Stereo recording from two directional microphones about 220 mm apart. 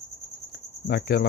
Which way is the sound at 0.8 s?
45° left (ahead or behind).